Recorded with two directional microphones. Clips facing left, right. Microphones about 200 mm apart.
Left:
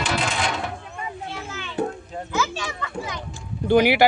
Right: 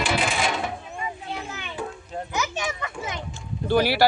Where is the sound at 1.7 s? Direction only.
60° left (ahead or behind).